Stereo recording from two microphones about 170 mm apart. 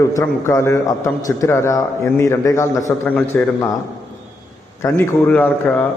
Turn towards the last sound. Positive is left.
turn(degrees=10)  # may be behind; listen again after turning